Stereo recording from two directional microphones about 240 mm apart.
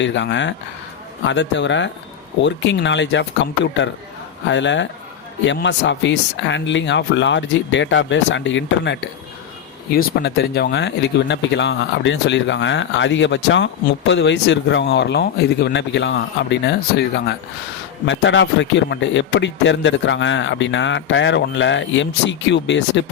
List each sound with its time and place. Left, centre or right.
0.0 s speech: left